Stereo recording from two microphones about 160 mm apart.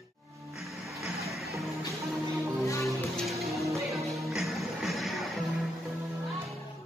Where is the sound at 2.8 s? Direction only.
Centre (ahead or behind).